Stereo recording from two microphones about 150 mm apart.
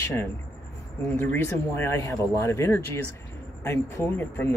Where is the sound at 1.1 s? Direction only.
15° left (ahead or behind).